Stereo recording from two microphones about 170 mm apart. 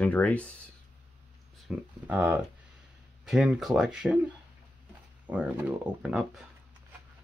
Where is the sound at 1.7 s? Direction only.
5° right (ahead or behind).